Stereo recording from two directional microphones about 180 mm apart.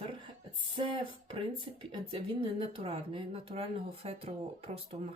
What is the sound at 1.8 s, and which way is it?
Speech, 30° right (ahead or behind).